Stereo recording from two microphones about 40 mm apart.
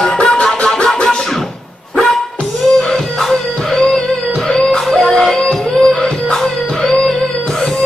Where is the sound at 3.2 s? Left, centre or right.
Centre.